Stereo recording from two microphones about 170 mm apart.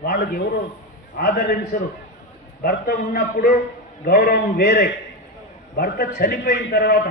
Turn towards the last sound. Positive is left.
turn(degrees=70)  # may be behind; listen again after turning